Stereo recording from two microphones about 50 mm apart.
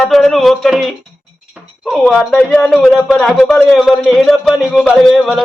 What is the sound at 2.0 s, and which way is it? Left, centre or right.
A man's voice, centre.